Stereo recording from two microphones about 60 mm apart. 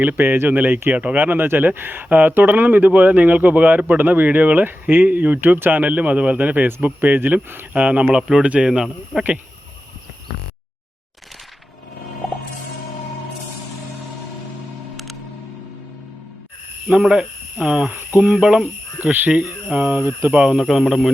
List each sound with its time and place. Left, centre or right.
0.0 s speech: right
7.7 s speech: right
16.9 s cricket: centre
19.7 s speech: right
20.0 s speech: right
20.3 s speech: centre